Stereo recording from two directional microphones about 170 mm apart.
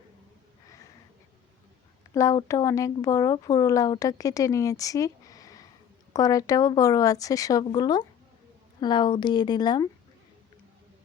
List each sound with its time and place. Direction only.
2.1 s speech: 20° left (ahead or behind)